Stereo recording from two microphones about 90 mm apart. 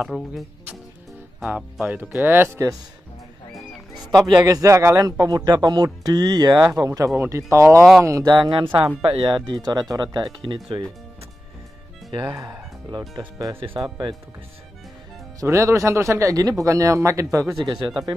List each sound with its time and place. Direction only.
0.1 s speech: centre (ahead or behind)
1.9 s speech: 20° right (ahead or behind)
4.0 s speech: 45° right (ahead or behind)
6.7 s speech: 35° right (ahead or behind)
8.3 s speech: 60° right (ahead or behind)
12.1 s speech: 55° right (ahead or behind)
15.4 s speech: 30° right (ahead or behind)